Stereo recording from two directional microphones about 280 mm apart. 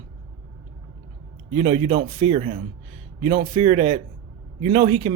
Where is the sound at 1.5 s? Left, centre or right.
Centre.